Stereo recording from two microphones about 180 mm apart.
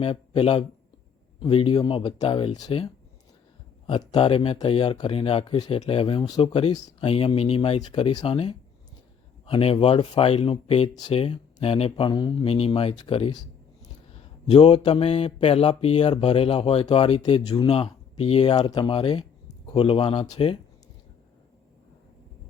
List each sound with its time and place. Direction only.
0.0 s speech: 30° left (ahead or behind)